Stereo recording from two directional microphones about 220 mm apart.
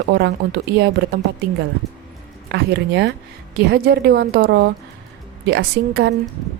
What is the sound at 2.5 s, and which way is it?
Speech, 50° right (ahead or behind).